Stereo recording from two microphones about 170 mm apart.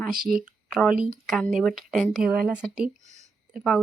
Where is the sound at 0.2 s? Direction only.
55° right (ahead or behind).